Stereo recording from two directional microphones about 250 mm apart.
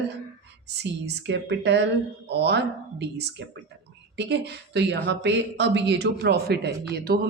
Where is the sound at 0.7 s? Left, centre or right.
Right.